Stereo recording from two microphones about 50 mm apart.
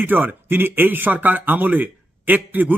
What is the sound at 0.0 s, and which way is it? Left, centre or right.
Speech, right.